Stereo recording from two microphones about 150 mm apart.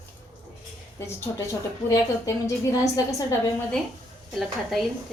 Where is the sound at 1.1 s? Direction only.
15° left (ahead or behind).